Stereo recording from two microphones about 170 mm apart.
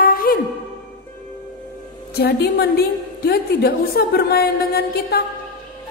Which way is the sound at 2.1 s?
75° left (ahead or behind).